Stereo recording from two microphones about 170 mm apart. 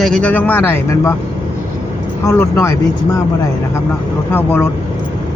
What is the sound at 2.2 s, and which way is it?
Speech, 15° left (ahead or behind).